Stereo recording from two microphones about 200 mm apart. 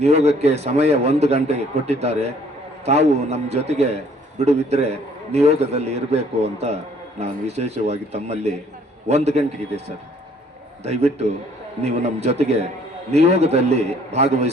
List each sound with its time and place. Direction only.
0.0 s a man's voice: 35° right (ahead or behind)
10.8 s a man's voice: 35° right (ahead or behind)